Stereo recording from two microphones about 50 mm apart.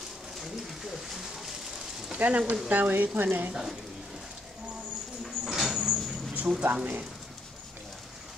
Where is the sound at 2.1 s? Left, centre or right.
Right.